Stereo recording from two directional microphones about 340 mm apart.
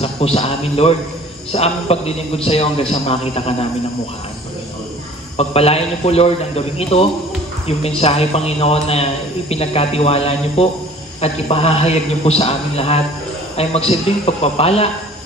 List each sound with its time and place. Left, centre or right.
0.0 s a man's voice: centre
5.4 s a man's voice: centre